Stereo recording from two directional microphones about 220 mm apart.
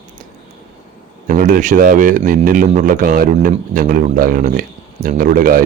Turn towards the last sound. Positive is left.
turn(degrees=-40)  # may be behind; listen again after turning